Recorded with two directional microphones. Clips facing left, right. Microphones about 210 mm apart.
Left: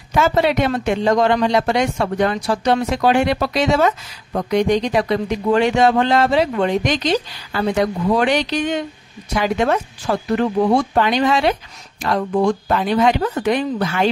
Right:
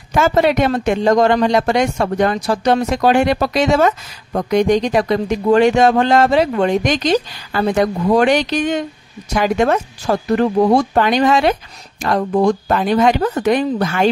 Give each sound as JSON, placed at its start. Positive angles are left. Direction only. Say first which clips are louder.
{"t": 0.1, "sound": "speech", "louder": "right 2 dB", "side_deg": -50}